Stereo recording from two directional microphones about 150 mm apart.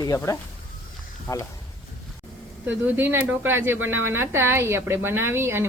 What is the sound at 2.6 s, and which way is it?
Speech, 10° right (ahead or behind).